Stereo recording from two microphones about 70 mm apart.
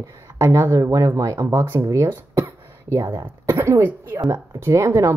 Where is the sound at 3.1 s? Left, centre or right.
Right.